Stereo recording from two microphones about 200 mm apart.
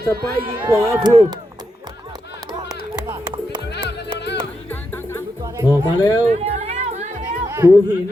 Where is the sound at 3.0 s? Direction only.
20° right (ahead or behind).